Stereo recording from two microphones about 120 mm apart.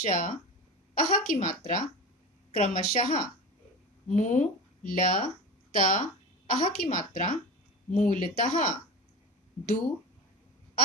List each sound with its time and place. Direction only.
0.0 s a woman's voice: 80° left
2.5 s a woman's voice: 75° left (ahead or behind)